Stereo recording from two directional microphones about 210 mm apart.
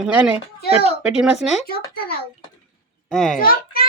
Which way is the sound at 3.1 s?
Centre (ahead or behind).